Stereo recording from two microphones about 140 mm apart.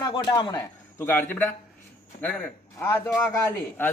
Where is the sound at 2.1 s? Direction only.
90° left.